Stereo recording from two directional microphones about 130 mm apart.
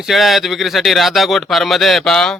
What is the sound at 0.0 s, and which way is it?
Speech, centre (ahead or behind).